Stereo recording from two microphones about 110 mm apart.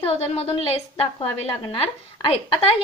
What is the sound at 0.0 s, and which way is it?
A woman's voice, 65° left (ahead or behind).